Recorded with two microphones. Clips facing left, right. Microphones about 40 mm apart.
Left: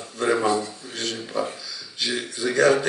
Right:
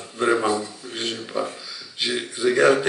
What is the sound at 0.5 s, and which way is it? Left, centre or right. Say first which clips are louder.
Speech: left 1 dB; centre.